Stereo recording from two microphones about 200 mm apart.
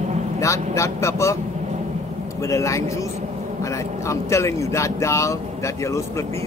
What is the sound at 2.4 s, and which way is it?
Speech, 15° left (ahead or behind).